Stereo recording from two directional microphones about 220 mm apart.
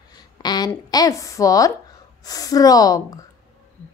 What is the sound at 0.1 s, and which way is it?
A woman's voice, 20° left (ahead or behind).